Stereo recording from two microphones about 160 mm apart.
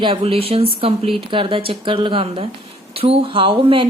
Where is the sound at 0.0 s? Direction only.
35° right (ahead or behind).